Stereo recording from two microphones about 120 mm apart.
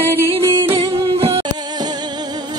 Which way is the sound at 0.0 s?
20° right (ahead or behind).